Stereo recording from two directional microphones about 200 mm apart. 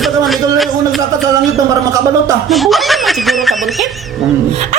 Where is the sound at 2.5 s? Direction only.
Centre (ahead or behind).